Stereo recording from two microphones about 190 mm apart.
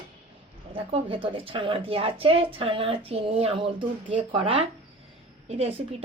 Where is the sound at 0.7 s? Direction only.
30° right (ahead or behind).